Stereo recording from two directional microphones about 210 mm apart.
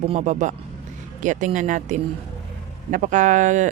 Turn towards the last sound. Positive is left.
turn(degrees=-35)  # may be behind; listen again after turning